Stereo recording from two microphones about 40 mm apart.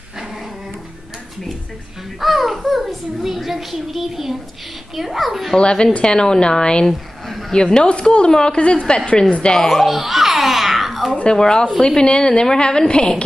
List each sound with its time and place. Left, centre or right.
2.1 s a child's voice: centre
5.6 s a woman's voice: left
6.9 s a sound: centre
7.5 s a woman's voice: centre
9.7 s speech: centre
9.9 s babbling: centre
11.3 s a woman's voice: centre